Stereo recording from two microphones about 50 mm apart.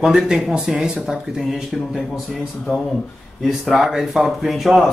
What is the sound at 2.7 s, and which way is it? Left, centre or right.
Speech, centre.